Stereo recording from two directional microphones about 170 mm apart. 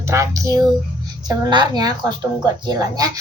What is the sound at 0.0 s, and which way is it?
A woman's voice, 15° right (ahead or behind).